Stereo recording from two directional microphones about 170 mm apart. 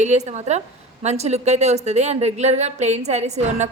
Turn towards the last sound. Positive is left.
turn(degrees=-40)  # may be behind; listen again after turning